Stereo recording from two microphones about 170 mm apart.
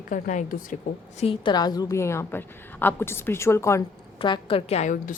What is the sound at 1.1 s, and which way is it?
A woman's voice, 35° left (ahead or behind).